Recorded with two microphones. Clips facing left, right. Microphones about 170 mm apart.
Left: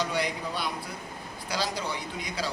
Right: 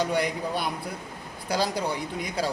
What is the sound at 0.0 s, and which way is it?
A man's voice, 55° right (ahead or behind).